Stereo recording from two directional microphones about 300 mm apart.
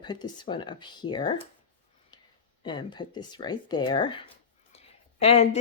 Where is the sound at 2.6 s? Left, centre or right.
Centre.